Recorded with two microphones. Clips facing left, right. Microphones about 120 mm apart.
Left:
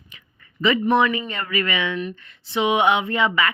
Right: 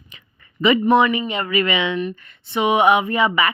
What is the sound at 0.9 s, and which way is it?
Speech, 10° right (ahead or behind).